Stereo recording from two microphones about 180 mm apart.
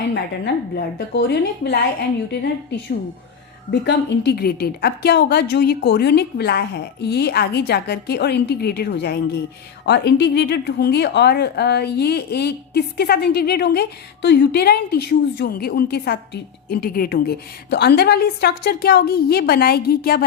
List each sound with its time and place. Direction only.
0.1 s a woman's voice: 65° left (ahead or behind)